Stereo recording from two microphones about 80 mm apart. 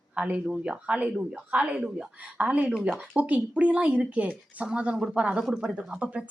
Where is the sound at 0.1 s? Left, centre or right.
Centre.